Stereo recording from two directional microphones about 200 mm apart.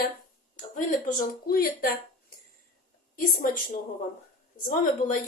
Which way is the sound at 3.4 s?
40° left (ahead or behind).